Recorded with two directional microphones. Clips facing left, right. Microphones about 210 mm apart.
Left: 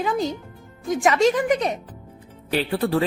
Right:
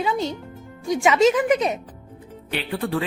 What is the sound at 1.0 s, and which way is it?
Speech, 5° right (ahead or behind).